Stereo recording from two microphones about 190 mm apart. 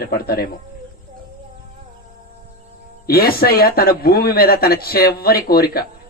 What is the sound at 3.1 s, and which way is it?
Speech, 55° left (ahead or behind).